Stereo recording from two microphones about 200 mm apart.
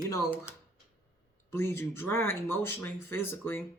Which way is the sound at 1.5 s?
10° left (ahead or behind).